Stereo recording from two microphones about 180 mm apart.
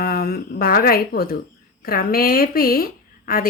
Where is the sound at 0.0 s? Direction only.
55° left (ahead or behind).